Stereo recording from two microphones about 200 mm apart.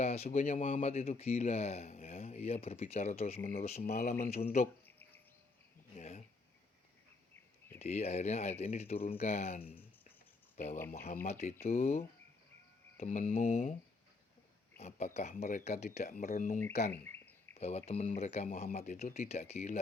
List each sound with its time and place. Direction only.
0.0 s speech: 35° left (ahead or behind)
6.0 s a sound: 35° left (ahead or behind)
7.8 s speech: 35° left (ahead or behind)
11.0 s speech: 40° left (ahead or behind)
14.8 s speech: 35° left (ahead or behind)
17.0 s bird: 10° left (ahead or behind)
17.6 s speech: 30° left (ahead or behind)